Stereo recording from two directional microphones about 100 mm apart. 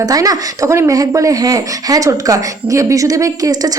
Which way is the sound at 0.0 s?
40° right (ahead or behind).